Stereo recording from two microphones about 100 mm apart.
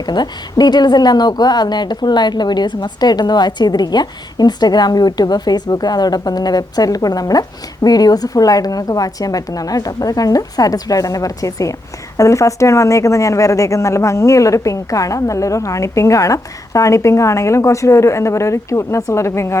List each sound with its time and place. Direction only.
0.0 s speech: 45° left (ahead or behind); by 19.5 s 25° left (ahead or behind)